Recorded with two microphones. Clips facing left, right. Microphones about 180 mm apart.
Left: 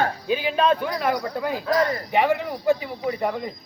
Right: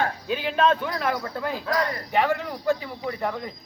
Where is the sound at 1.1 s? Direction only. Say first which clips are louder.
Left 3 dB; 15° left (ahead or behind).